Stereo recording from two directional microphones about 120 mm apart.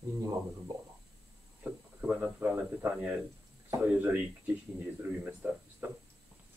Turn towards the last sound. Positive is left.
turn(degrees=-15)  # may be behind; listen again after turning